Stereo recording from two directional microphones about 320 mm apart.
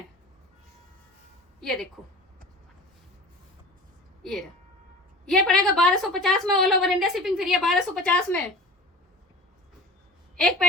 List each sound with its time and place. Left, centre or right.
4.2 s a woman's voice: centre
10.3 s a woman's voice: centre